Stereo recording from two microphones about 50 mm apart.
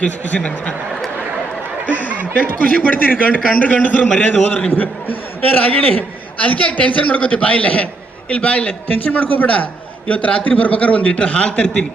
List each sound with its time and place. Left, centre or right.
0.0 s a man's voice: left
2.3 s a man's voice: left